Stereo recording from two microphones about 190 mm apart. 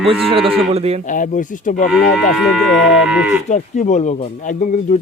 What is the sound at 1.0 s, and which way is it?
Speech, 45° left (ahead or behind).